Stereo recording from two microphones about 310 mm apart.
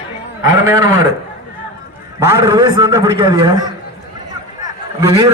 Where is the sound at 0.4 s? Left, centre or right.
Centre.